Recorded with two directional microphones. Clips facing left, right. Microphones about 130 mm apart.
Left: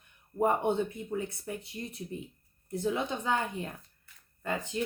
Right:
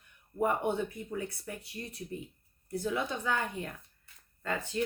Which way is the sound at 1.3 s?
25° left (ahead or behind).